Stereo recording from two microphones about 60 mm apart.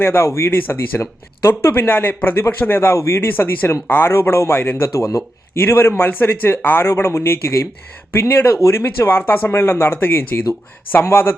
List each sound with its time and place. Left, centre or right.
0.0 s speech: left
4.1 s speech: left
4.9 s speech: left
5.5 s a man's voice: left
9.0 s speech: left